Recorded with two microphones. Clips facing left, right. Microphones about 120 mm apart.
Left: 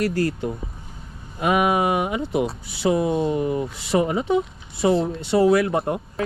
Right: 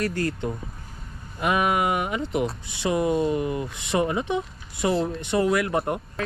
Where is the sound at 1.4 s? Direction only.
25° left (ahead or behind).